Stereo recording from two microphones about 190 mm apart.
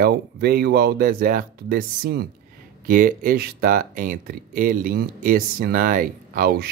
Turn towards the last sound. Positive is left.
turn(degrees=-50)  # may be behind; listen again after turning